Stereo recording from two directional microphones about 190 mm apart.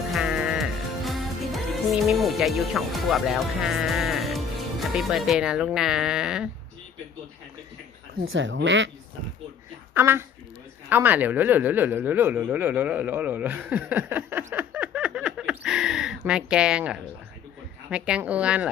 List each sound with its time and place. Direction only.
0.1 s music: centre (ahead or behind)
8.3 s speech: 80° right
9.9 s a woman's voice: 10° right (ahead or behind)